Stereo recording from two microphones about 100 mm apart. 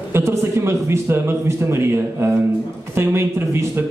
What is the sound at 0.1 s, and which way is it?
Speech, 25° right (ahead or behind).